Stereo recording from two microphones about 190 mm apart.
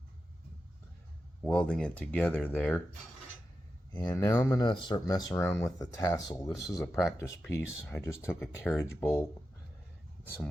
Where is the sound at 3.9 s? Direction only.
20° left (ahead or behind).